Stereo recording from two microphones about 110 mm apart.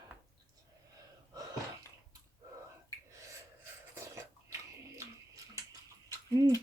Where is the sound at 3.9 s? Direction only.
25° right (ahead or behind).